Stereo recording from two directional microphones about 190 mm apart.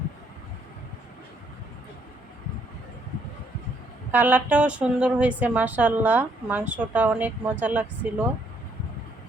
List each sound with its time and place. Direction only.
4.1 s a woman's voice: 10° right (ahead or behind)